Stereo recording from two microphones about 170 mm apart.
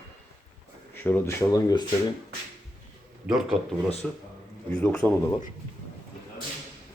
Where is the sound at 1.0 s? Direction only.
15° left (ahead or behind).